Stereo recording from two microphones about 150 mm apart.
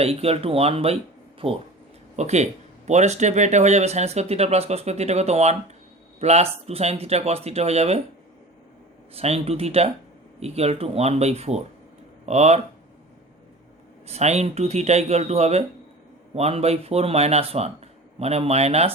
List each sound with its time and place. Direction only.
0.0 s speech: 40° right (ahead or behind)
9.1 s speech: 40° right (ahead or behind)
14.1 s speech: 45° right (ahead or behind)